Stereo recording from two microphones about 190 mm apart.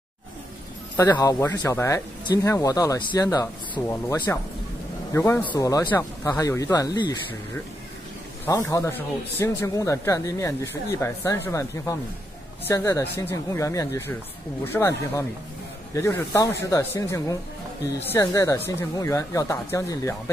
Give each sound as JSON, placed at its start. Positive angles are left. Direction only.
{"t": 0.9, "sound": "a man's voice", "side_deg": 15}
{"t": 8.5, "sound": "a man's voice", "side_deg": 15}